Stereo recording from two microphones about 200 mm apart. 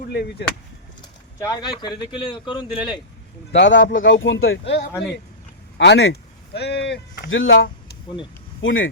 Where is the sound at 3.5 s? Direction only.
65° left (ahead or behind).